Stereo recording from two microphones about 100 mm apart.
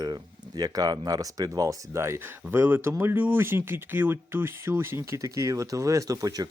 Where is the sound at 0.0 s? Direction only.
40° right (ahead or behind).